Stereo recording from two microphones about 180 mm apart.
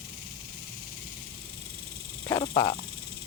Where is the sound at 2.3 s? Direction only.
15° left (ahead or behind).